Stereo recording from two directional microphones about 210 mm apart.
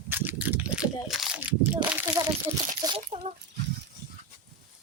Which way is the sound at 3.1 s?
30° right (ahead or behind).